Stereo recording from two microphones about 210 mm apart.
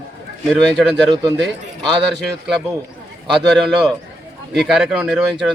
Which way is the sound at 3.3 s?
Centre (ahead or behind).